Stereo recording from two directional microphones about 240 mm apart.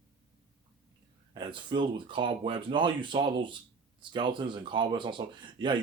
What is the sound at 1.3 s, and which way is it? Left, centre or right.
Speech, centre.